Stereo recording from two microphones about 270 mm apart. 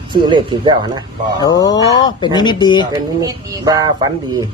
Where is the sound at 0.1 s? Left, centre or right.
Centre.